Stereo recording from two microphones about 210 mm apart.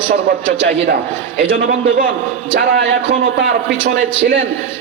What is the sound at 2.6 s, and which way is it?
Speech, 55° right (ahead or behind).